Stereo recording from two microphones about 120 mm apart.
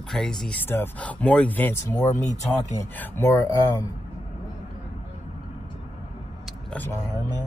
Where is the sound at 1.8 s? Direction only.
25° left (ahead or behind).